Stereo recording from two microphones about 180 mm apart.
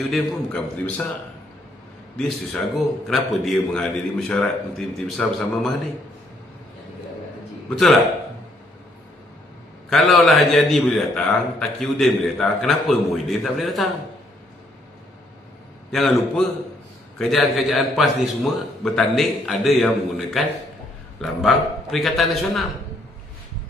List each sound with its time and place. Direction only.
0.0 s a man's voice: centre (ahead or behind)
2.1 s a man's voice: centre (ahead or behind)
7.7 s a man's voice: centre (ahead or behind)
9.8 s a man's voice: centre (ahead or behind)
15.9 s a man's voice: centre (ahead or behind)
21.2 s a man's voice: centre (ahead or behind)